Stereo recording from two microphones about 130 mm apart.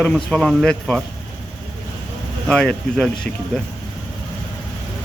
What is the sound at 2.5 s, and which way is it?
Speech, 5° left (ahead or behind).